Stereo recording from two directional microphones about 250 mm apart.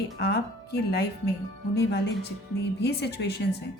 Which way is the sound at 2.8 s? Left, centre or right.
Left.